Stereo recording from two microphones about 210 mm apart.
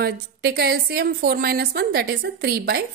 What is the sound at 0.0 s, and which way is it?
A woman's voice, 50° right (ahead or behind).